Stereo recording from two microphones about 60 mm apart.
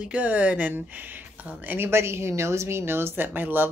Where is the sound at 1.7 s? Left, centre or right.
Right.